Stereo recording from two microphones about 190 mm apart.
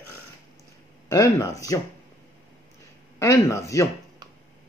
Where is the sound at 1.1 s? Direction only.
15° left (ahead or behind).